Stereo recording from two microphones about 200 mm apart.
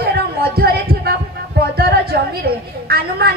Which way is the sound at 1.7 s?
50° right (ahead or behind).